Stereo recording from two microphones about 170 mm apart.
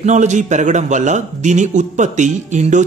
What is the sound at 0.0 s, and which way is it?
A man's voice, 45° right (ahead or behind).